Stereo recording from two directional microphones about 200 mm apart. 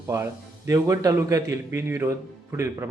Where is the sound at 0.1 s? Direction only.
15° right (ahead or behind).